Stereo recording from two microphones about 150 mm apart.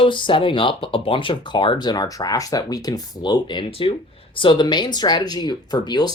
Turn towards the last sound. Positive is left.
turn(degrees=30)  # may be behind; listen again after turning